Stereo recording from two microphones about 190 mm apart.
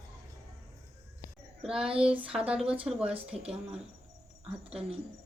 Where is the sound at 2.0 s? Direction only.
5° right (ahead or behind).